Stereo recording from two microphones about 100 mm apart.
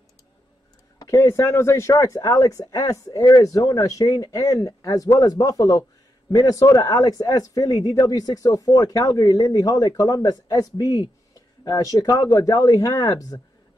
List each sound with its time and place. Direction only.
0.9 s speech: 30° left (ahead or behind)